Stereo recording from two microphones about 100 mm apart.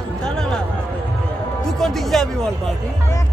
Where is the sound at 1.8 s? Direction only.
Centre (ahead or behind).